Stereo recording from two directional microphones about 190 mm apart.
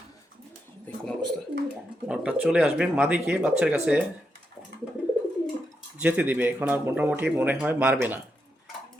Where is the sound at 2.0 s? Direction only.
5° right (ahead or behind).